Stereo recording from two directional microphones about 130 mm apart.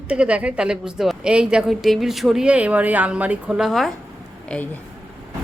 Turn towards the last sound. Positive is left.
turn(degrees=10)  # may be behind; listen again after turning